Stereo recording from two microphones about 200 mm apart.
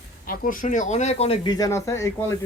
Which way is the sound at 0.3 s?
45° left (ahead or behind).